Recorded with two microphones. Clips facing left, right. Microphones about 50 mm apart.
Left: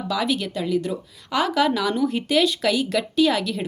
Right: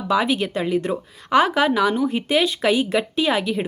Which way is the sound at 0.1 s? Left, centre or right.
Right.